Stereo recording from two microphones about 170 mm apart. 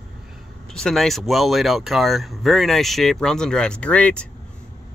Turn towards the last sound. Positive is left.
turn(degrees=5)  # may be behind; listen again after turning